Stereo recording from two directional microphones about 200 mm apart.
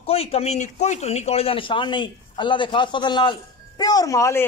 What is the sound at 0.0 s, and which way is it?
Speech, 30° left (ahead or behind).